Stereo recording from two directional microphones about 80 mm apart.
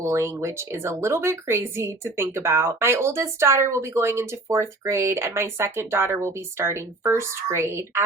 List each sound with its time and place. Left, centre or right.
0.0 s speech: right